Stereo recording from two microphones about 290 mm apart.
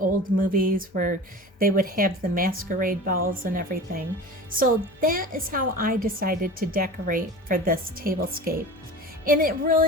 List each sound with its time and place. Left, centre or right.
0.0 s a woman's voice: right